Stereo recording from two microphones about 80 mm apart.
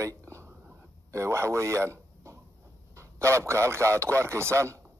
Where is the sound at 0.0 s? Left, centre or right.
Right.